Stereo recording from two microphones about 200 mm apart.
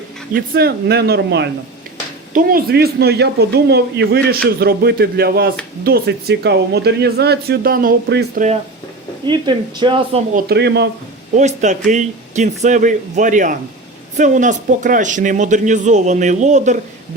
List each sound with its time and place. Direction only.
0.5 s speech: 55° right (ahead or behind)
9.2 s speech: 20° right (ahead or behind)
10.3 s speech: 55° right (ahead or behind)
11.3 s speech: 35° right (ahead or behind)